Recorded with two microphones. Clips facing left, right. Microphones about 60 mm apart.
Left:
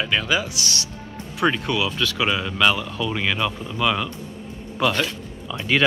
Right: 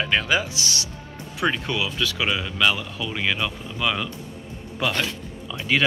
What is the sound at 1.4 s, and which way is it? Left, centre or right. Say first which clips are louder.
A man's voice: left 3 dB; centre.